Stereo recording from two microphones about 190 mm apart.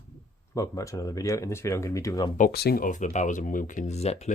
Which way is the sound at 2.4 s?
55° left (ahead or behind).